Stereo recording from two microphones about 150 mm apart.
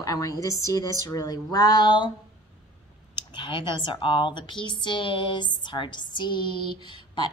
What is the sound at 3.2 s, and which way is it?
Speech, 35° left (ahead or behind).